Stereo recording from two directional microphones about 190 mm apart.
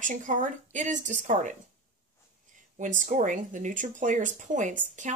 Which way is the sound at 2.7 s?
40° right (ahead or behind).